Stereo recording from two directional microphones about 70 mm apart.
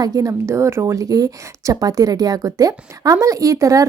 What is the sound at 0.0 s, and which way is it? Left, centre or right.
A woman's voice, right.